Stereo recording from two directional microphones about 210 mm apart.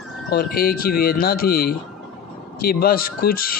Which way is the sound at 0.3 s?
45° left (ahead or behind).